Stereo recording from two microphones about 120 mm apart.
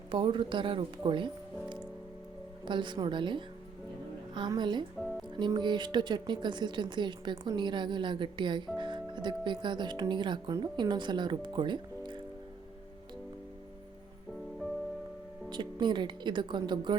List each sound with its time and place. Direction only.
0.1 s a woman's voice: 45° right (ahead or behind)
2.6 s speech: 40° right (ahead or behind)
15.4 s speech: 40° right (ahead or behind)